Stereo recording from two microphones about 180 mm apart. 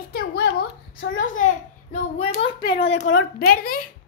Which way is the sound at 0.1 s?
65° left (ahead or behind).